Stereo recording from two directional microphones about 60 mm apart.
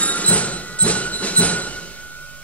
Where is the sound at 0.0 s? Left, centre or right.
Left.